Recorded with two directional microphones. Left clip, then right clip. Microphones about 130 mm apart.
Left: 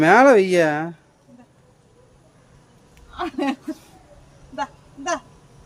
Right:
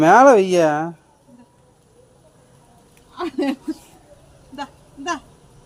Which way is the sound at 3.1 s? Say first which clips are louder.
Right 1 dB; 25° left (ahead or behind).